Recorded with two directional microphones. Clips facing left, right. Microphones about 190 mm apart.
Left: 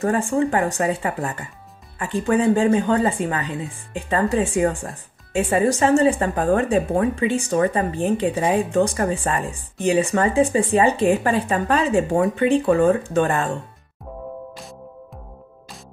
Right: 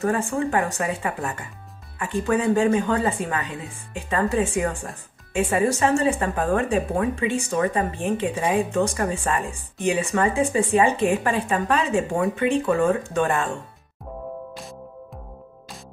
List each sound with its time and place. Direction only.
0.0 s speech: 35° left (ahead or behind)